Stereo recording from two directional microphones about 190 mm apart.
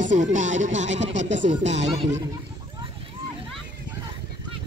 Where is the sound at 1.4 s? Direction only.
35° right (ahead or behind).